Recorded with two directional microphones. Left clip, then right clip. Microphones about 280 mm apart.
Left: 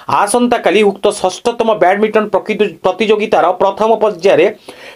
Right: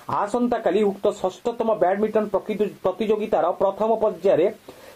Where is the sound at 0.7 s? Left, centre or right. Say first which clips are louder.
Left 9 dB; left.